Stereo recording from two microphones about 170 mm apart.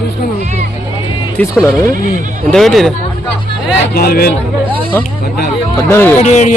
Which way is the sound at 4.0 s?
60° left (ahead or behind).